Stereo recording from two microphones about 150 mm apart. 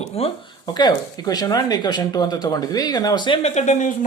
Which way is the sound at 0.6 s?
30° left (ahead or behind).